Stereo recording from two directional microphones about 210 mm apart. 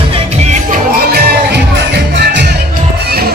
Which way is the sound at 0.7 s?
50° right (ahead or behind).